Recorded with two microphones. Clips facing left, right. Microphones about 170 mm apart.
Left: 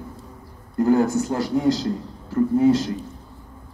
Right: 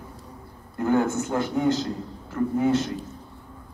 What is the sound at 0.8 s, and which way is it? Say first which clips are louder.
A man's voice: left 3 dB; 35° left (ahead or behind).